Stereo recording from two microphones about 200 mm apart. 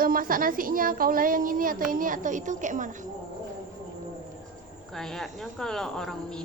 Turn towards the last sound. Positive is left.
turn(degrees=5)  # may be behind; listen again after turning